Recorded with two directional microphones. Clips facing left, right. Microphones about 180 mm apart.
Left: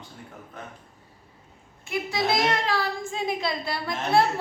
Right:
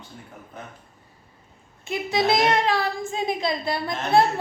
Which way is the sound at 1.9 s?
20° right (ahead or behind).